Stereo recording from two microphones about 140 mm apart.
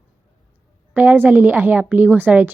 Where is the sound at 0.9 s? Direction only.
15° right (ahead or behind).